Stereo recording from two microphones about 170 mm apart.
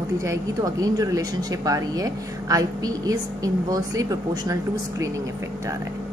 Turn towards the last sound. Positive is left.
turn(degrees=-20)  # may be behind; listen again after turning